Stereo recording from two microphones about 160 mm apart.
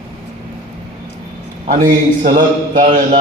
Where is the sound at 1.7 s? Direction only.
55° right (ahead or behind).